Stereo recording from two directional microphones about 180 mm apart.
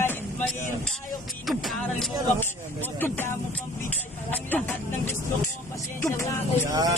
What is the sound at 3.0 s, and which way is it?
Speech, 10° left (ahead or behind).